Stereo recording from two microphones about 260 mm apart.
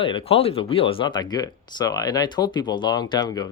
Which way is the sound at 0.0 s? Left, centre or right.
Centre.